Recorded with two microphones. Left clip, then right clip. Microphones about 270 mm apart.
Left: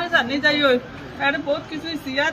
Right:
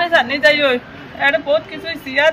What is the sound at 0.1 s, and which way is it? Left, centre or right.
Speech, right.